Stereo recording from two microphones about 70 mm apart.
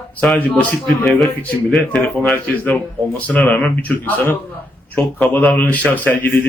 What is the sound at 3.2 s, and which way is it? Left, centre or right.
Speech, left.